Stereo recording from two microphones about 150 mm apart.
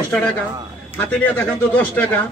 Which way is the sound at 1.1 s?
10° left (ahead or behind).